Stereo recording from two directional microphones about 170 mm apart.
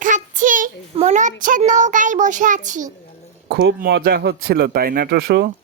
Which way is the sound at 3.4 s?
70° right (ahead or behind).